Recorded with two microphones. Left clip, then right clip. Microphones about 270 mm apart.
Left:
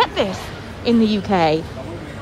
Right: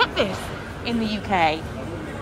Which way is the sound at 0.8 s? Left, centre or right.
Left.